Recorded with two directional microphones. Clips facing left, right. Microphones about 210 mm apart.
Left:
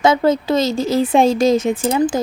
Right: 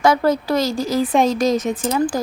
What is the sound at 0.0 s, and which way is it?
A woman's voice, 20° left (ahead or behind).